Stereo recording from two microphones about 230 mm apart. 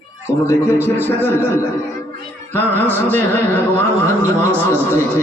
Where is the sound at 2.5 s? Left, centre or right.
Centre.